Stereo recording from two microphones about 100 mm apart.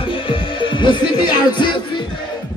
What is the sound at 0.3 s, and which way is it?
Music, 55° left (ahead or behind).